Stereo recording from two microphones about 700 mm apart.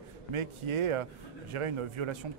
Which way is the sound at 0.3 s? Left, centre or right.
Right.